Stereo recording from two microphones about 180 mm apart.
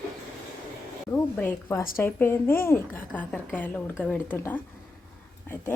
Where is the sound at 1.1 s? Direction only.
10° left (ahead or behind).